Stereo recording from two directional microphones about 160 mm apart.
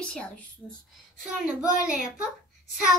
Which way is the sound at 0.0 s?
5° left (ahead or behind).